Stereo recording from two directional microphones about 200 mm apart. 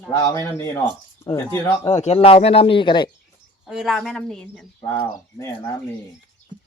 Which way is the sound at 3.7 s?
Centre (ahead or behind).